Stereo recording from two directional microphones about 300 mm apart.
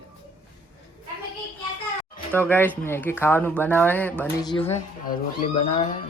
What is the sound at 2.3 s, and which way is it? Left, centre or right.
Speech, centre.